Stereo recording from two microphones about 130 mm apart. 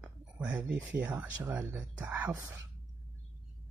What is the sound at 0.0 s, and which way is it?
Speech, 10° right (ahead or behind).